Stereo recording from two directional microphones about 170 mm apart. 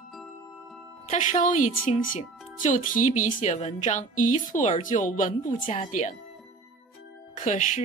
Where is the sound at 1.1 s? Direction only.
45° left (ahead or behind).